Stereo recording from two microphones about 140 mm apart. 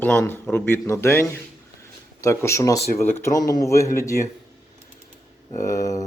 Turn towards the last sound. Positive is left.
turn(degrees=25)  # may be behind; listen again after turning